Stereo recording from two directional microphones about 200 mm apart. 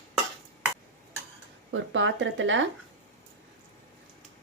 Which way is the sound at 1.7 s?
70° right (ahead or behind).